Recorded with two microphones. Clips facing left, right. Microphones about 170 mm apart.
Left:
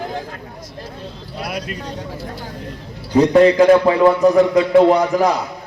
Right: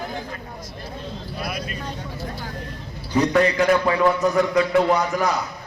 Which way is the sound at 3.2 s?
25° left (ahead or behind).